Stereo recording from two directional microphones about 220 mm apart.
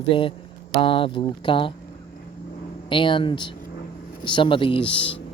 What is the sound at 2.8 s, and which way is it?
Speech, 20° left (ahead or behind).